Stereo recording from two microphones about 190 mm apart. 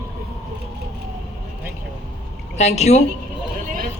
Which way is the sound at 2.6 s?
35° left (ahead or behind).